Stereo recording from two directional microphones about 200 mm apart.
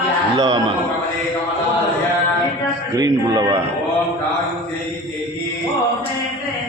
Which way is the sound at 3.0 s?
20° right (ahead or behind).